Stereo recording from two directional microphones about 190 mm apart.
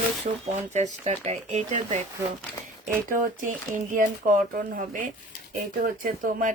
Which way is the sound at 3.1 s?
45° right (ahead or behind).